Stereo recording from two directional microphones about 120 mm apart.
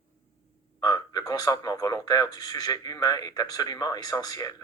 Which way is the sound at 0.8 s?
30° left (ahead or behind).